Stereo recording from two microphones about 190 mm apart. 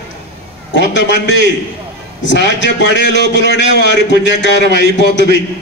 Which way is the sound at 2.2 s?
70° left (ahead or behind).